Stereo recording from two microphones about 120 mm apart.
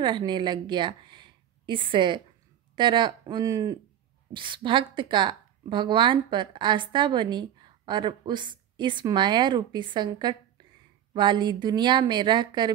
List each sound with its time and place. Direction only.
0.0 s a woman's voice: 40° right (ahead or behind)
4.3 s a woman's voice: 45° right (ahead or behind)